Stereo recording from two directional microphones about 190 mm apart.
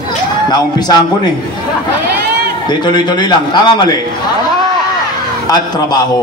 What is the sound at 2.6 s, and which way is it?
A man's voice, 25° left (ahead or behind).